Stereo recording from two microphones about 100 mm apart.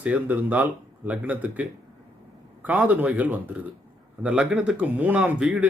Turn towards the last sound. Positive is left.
turn(degrees=-15)  # may be behind; listen again after turning